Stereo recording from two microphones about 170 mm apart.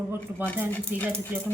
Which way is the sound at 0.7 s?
10° left (ahead or behind).